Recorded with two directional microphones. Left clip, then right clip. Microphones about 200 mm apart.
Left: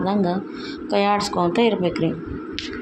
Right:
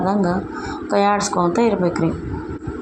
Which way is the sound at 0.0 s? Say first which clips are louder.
Right 3 dB; 20° right (ahead or behind).